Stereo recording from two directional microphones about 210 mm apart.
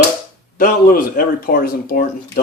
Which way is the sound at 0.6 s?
40° left (ahead or behind).